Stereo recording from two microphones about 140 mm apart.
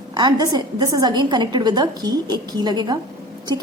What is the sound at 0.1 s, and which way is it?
A woman's voice, 30° right (ahead or behind).